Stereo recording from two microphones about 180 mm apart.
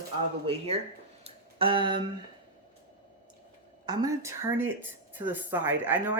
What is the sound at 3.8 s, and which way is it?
Speech, 20° right (ahead or behind).